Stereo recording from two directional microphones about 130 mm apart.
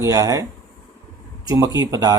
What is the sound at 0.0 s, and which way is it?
Speech, 25° right (ahead or behind).